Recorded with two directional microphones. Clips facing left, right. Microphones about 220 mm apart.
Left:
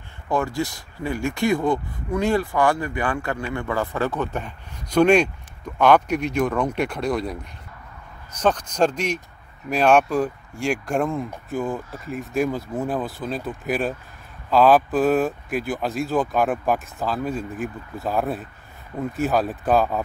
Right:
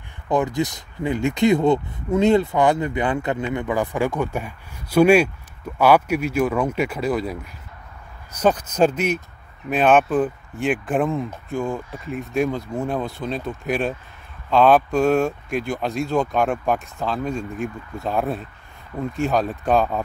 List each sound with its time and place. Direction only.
0.3 s speech: 20° right (ahead or behind)
8.4 s speech: 10° right (ahead or behind)